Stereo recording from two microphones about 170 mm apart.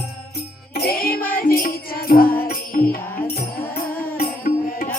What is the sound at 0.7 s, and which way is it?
Music, 65° left (ahead or behind).